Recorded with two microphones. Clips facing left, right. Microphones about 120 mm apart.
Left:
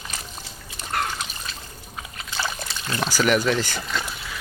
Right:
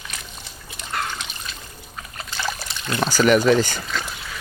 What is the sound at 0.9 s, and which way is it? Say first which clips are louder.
Trickle: left 1 dB; 55° left (ahead or behind).